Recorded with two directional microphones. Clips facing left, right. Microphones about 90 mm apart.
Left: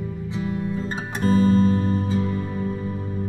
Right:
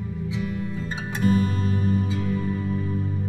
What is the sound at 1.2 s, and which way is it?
Music, 30° left (ahead or behind).